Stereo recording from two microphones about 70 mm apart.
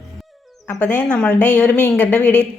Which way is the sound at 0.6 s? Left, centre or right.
Left.